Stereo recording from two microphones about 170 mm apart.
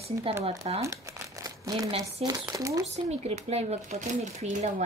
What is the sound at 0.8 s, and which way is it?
Speech, 20° right (ahead or behind).